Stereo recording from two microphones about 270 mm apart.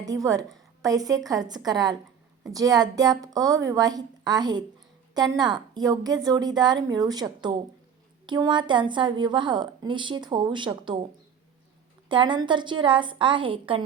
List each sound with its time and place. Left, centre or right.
0.0 s a woman's voice: centre
12.0 s a woman's voice: centre